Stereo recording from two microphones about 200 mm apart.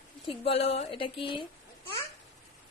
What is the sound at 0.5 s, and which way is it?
Speech, 30° left (ahead or behind).